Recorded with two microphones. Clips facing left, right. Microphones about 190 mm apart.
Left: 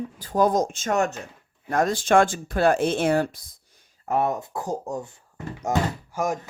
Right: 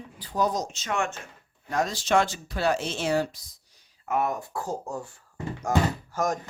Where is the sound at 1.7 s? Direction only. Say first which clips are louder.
Left 5 dB; 55° left (ahead or behind).